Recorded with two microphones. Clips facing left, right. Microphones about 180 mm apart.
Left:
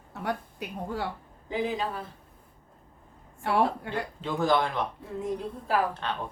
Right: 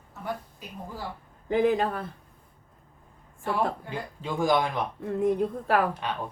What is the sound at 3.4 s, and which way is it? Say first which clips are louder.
Speech: left 2 dB; 75° left (ahead or behind).